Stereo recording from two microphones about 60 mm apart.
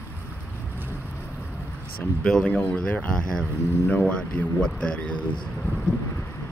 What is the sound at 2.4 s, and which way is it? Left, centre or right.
Speech, left.